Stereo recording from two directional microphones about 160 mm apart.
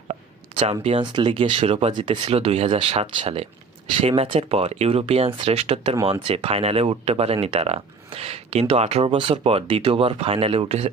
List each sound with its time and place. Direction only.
0.1 s speech: 40° right (ahead or behind)